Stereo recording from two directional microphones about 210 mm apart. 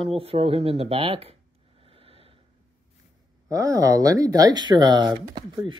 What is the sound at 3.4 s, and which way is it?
Speech, 15° right (ahead or behind).